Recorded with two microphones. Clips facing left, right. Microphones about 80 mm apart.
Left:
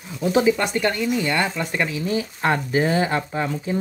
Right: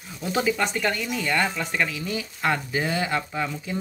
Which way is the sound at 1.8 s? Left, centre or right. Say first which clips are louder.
Left 5 dB; left.